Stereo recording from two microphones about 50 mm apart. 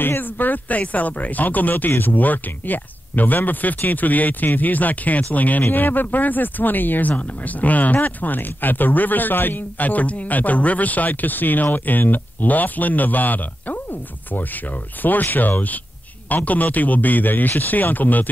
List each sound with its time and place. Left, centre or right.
0.0 s speech: left